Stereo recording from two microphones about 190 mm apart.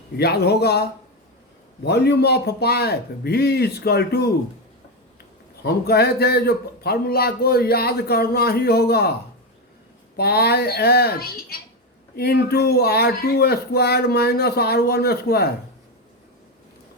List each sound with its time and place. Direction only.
0.2 s a man's voice: 60° left (ahead or behind)
5.6 s a man's voice: 55° left (ahead or behind)
10.2 s a man's voice: 55° left (ahead or behind)